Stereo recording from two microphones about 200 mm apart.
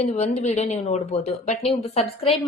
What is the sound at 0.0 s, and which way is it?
A woman's voice, 30° left (ahead or behind).